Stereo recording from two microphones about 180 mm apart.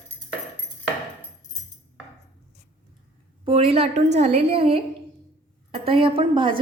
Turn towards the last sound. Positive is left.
turn(degrees=-30)  # may be behind; listen again after turning